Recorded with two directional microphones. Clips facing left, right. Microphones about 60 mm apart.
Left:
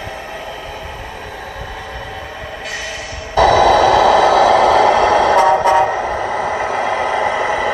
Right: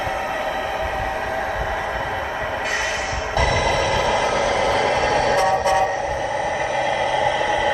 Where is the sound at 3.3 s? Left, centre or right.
Left.